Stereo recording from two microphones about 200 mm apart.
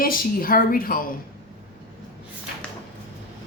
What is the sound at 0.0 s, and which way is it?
Speech, 45° left (ahead or behind).